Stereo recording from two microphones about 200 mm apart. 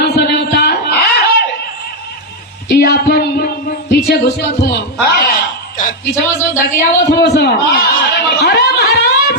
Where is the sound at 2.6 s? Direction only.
55° left (ahead or behind).